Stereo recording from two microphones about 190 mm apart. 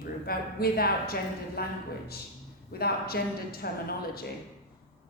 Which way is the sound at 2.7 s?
55° left (ahead or behind).